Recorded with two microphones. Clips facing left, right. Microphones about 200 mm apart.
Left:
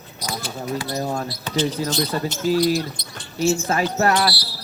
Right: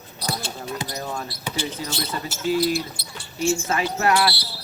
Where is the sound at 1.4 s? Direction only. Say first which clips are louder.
Left 7 dB; 10° right (ahead or behind).